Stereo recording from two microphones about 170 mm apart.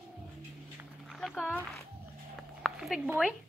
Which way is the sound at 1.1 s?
Centre (ahead or behind).